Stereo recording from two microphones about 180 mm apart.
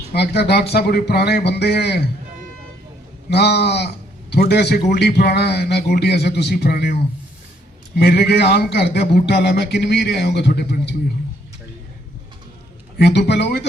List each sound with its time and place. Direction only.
0.1 s a man's voice: 65° left (ahead or behind)
3.2 s a man's voice: 65° left (ahead or behind)
13.0 s speech: 70° left (ahead or behind)